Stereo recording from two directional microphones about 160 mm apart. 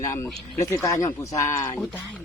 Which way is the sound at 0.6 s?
20° left (ahead or behind).